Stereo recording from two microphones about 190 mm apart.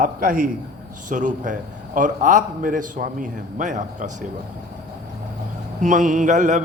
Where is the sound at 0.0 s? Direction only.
50° right (ahead or behind).